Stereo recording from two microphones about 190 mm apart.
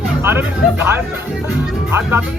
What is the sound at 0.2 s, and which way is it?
Speech, 10° right (ahead or behind).